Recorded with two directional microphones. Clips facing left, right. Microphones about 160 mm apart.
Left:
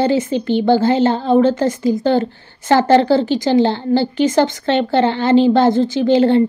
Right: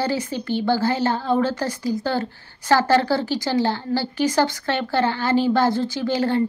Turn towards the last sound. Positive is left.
turn(degrees=20)  # may be behind; listen again after turning